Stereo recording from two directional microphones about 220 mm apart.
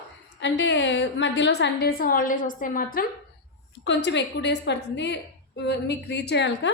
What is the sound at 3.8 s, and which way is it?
A woman's voice, 50° left (ahead or behind).